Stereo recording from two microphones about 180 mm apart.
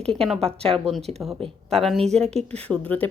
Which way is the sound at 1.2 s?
15° right (ahead or behind).